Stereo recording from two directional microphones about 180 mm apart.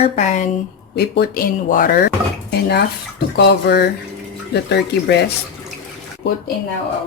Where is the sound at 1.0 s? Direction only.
65° left (ahead or behind).